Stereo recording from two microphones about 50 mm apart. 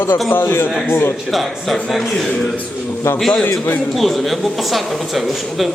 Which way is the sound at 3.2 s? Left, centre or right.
Centre.